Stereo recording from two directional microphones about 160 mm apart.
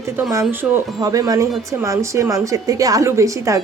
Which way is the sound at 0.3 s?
15° right (ahead or behind).